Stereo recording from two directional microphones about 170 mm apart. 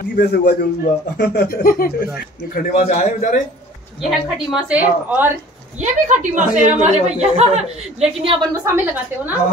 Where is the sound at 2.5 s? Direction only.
45° left (ahead or behind).